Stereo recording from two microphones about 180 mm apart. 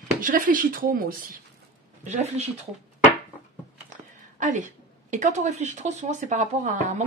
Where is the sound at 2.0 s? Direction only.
40° right (ahead or behind).